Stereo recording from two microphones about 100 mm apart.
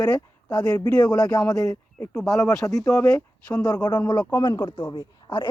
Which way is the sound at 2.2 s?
5° left (ahead or behind).